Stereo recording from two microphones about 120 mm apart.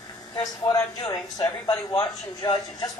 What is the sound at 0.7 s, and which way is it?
A man's voice, 25° left (ahead or behind).